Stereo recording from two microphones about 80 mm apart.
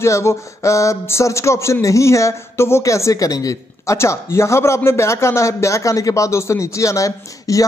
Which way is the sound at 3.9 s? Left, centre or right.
Left.